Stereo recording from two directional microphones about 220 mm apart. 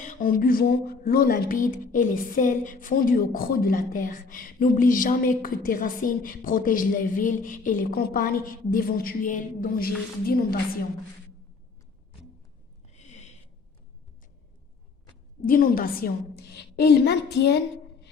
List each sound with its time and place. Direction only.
0.0 s speech: 35° left (ahead or behind)
12.9 s a sound: 30° left (ahead or behind)
15.4 s a woman's voice: 40° left (ahead or behind)